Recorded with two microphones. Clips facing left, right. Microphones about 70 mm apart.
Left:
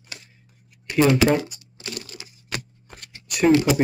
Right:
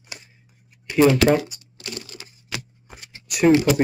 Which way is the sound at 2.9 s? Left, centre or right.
Centre.